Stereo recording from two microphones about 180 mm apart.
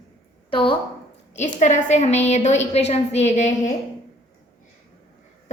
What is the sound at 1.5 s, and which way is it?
A woman's voice, 40° left (ahead or behind).